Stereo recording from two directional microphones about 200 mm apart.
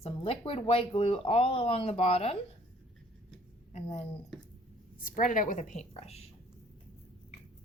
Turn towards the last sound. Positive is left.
turn(degrees=30)  # may be behind; listen again after turning